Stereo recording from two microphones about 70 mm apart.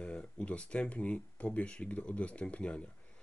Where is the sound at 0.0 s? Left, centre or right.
Centre.